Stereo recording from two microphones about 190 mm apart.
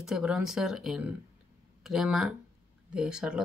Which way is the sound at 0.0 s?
5° right (ahead or behind).